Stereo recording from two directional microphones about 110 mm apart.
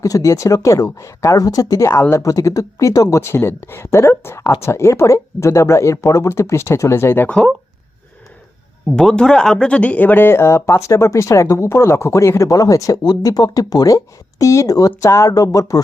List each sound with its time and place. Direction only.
0.0 s speech: 30° left (ahead or behind)
8.9 s speech: 5° left (ahead or behind); by 15.8 s 30° left (ahead or behind)